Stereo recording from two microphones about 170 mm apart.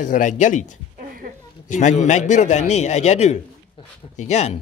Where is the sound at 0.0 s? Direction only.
50° left (ahead or behind).